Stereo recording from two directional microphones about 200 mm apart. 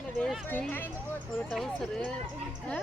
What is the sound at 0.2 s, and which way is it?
A child's voice, centre (ahead or behind).